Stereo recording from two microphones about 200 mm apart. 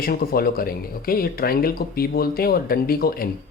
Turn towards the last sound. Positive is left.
turn(degrees=50)  # may be behind; listen again after turning